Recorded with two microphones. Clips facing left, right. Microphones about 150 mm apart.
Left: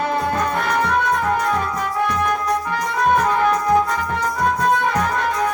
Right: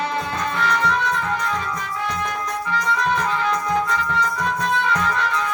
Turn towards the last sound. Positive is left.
turn(degrees=45)  # may be behind; listen again after turning